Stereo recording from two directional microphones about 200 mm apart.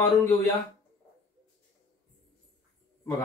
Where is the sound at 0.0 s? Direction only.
10° left (ahead or behind).